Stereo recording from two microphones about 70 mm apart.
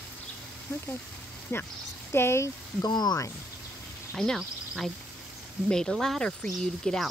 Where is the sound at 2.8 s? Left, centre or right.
Left.